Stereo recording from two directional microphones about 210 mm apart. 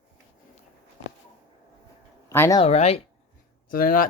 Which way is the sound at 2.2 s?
15° left (ahead or behind).